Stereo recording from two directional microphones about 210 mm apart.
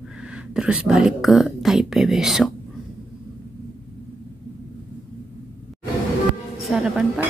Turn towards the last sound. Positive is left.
turn(degrees=0)  # may be behind; listen again after turning